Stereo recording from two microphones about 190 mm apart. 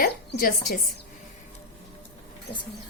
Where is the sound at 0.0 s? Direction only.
50° left (ahead or behind).